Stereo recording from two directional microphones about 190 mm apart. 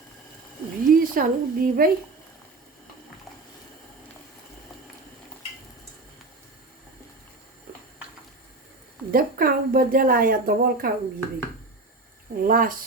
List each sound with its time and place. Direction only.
0.9 s speech: 45° right (ahead or behind)
9.1 s a woman's voice: 50° right (ahead or behind)
12.4 s a woman's voice: 45° right (ahead or behind)